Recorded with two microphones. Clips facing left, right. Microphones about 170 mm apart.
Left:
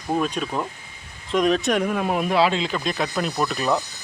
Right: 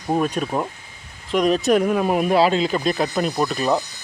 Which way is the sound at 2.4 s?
40° right (ahead or behind).